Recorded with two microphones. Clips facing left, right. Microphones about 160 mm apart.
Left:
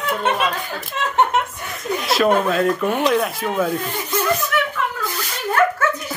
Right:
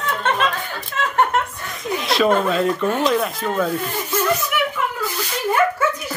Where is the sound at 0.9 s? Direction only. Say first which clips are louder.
Even; 15° left (ahead or behind).